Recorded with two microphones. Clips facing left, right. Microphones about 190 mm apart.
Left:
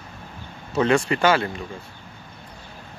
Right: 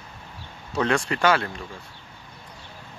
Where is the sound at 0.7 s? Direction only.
5° left (ahead or behind).